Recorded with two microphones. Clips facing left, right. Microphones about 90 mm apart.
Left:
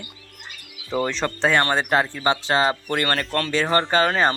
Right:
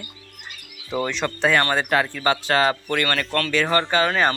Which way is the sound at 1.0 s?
30° left (ahead or behind).